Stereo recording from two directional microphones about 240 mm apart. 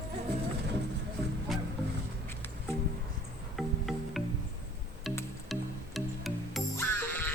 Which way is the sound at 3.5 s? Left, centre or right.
Centre.